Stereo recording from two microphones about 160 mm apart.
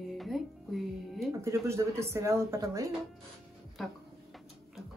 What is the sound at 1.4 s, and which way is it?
Speech, 15° right (ahead or behind).